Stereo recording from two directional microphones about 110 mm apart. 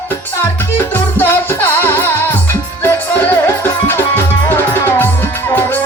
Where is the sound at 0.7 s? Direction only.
20° left (ahead or behind).